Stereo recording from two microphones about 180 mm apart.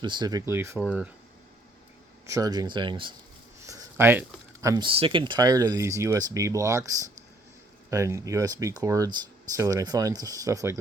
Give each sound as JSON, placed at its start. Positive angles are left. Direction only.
{"t": 0.0, "sound": "speech", "side_deg": -25}
{"t": 2.2, "sound": "speech", "side_deg": -20}
{"t": 3.6, "sound": "writing", "side_deg": -15}
{"t": 4.6, "sound": "speech", "side_deg": -20}